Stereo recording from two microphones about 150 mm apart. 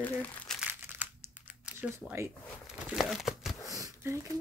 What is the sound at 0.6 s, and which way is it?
Crumpling, 15° right (ahead or behind).